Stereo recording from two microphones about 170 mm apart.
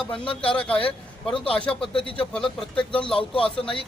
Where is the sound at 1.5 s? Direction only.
5° left (ahead or behind).